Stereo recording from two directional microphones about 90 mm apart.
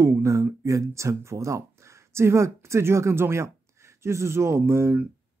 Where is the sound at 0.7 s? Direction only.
35° right (ahead or behind).